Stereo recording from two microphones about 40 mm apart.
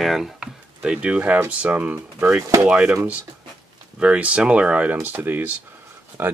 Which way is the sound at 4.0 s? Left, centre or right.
Right.